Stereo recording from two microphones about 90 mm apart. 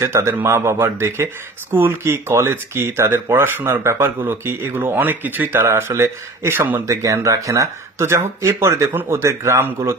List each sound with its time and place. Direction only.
0.0 s speech: 30° right (ahead or behind)
6.9 s speech: 35° right (ahead or behind)